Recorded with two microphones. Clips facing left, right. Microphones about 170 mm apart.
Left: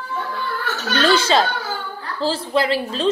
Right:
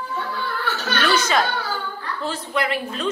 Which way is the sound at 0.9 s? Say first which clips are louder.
Left 4 dB; 30° left (ahead or behind).